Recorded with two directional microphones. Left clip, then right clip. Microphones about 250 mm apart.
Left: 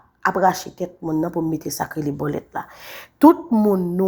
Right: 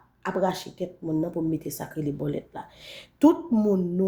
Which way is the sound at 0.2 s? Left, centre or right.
Centre.